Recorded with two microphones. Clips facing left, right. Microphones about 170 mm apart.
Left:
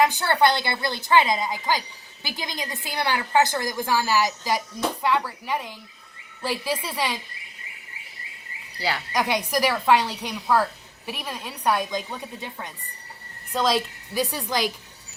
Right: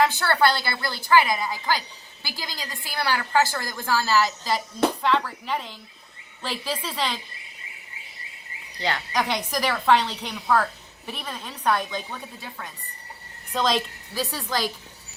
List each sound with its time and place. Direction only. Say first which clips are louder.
0.0 s a woman's voice: left 1 dB; 20° left (ahead or behind)
8.8 s a woman's voice: even; 10° left (ahead or behind)
13.5 s a child's voice: left 1 dB; 5° left (ahead or behind)
14.1 s a woman's voice: left 2 dB; 15° left (ahead or behind)